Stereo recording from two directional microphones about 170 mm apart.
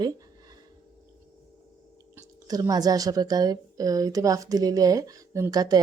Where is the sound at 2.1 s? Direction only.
20° right (ahead or behind).